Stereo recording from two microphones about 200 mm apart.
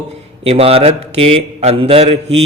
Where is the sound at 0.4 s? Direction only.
30° right (ahead or behind).